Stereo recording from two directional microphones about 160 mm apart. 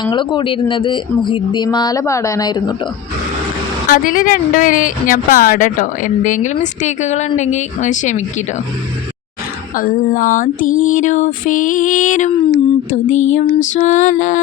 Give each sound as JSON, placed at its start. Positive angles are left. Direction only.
{"t": 0.0, "sound": "speech", "side_deg": 30}
{"t": 3.8, "sound": "speech", "side_deg": 60}
{"t": 9.7, "sound": "speech", "side_deg": 60}
{"t": 12.9, "sound": "music", "side_deg": 50}